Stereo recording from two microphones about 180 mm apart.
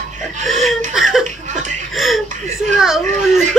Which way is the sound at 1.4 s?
40° right (ahead or behind).